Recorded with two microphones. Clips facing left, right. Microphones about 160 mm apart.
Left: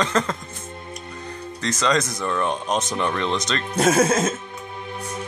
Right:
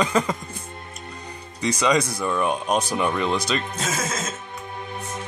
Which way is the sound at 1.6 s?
10° right (ahead or behind).